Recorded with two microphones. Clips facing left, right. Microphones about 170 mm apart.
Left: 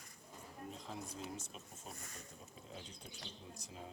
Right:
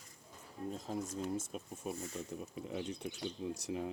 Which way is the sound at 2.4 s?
70° right (ahead or behind).